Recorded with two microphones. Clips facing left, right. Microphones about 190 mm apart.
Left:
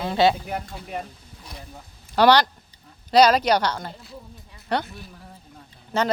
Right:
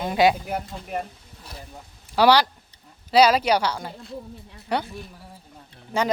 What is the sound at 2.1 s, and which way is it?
Speech, 5° right (ahead or behind).